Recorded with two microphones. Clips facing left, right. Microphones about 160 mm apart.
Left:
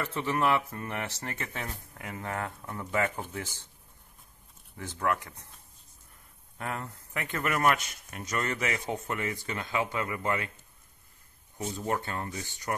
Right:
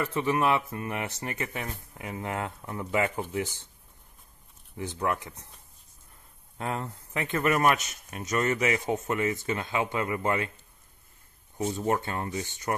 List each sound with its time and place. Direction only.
0.0 s speech: 15° right (ahead or behind)
4.7 s speech: 20° right (ahead or behind)
6.6 s speech: 25° right (ahead or behind)
11.5 s speech: 20° right (ahead or behind)